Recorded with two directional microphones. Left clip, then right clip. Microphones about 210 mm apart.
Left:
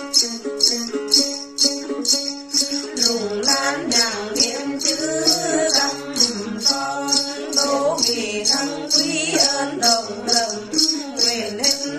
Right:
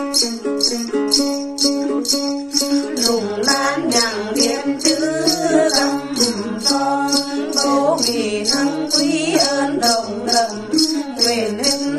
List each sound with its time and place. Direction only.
1.1 s music: 15° right (ahead or behind)